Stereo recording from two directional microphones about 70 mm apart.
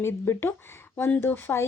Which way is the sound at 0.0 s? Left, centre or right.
Left.